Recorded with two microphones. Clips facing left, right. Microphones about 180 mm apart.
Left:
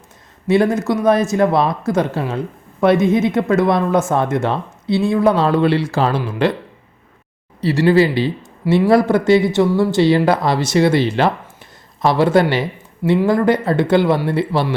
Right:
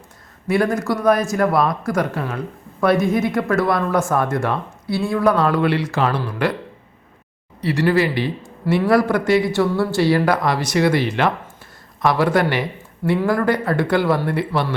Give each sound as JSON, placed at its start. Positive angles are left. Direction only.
{"t": 0.4, "sound": "speech", "side_deg": 25}
{"t": 7.6, "sound": "speech", "side_deg": 25}